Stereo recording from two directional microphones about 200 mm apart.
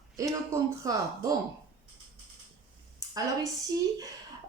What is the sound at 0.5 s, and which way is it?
Speech, 15° right (ahead or behind).